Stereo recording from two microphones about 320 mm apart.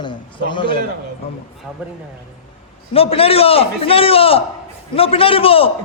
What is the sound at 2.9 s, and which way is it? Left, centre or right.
A man's voice, centre.